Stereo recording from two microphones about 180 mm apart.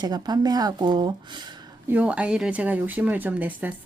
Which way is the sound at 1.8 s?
10° right (ahead or behind).